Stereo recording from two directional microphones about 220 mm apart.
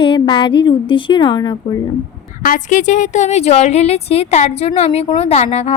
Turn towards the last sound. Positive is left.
turn(degrees=30)  # may be behind; listen again after turning